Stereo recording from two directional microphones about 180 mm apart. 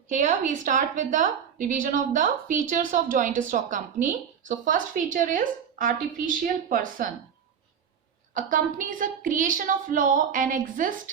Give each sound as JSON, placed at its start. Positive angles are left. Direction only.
{"t": 0.1, "sound": "a woman's voice", "side_deg": -45}
{"t": 8.3, "sound": "a woman's voice", "side_deg": -50}